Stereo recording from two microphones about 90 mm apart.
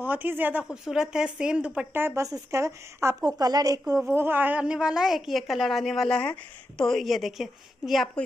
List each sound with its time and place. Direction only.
0.0 s speech: 20° right (ahead or behind)
0.7 s speech: 5° right (ahead or behind); by 2.2 s 25° right (ahead or behind)
2.5 s speech: 35° right (ahead or behind)
3.3 s a woman's voice: 45° right (ahead or behind)
4.1 s a woman's voice: 25° right (ahead or behind); by 8.1 s centre (ahead or behind)